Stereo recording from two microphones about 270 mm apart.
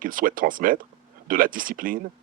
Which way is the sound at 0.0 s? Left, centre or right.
Right.